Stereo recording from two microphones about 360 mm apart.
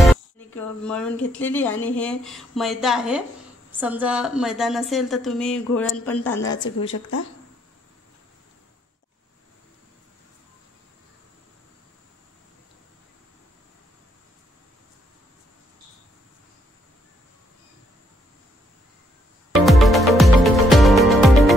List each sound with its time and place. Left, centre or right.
0.6 s a woman's voice: centre
6.9 s speech: left
19.5 s music: centre